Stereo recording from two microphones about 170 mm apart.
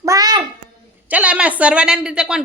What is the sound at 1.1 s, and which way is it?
Speech, 5° right (ahead or behind).